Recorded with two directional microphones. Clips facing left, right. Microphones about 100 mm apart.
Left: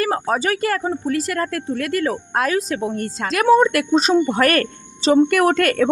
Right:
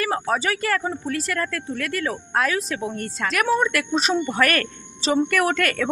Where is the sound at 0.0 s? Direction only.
40° left (ahead or behind).